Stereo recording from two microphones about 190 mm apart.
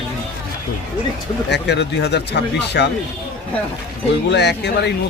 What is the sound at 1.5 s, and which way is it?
Speech, 65° left (ahead or behind).